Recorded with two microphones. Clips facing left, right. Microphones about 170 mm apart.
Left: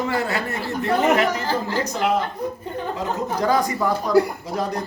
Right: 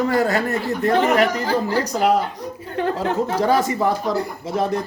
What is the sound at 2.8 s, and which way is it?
Speech, 90° right.